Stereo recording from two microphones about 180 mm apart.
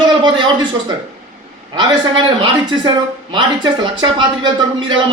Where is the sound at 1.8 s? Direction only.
25° right (ahead or behind).